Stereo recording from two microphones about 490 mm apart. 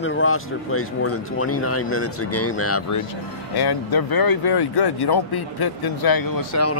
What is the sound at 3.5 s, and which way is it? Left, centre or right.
A man's voice, left.